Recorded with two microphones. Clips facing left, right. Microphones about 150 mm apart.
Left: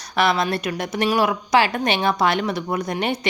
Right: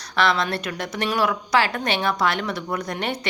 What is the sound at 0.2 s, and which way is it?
A woman's voice, 15° left (ahead or behind).